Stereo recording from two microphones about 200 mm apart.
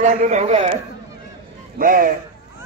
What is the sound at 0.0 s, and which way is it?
Speech, 40° right (ahead or behind).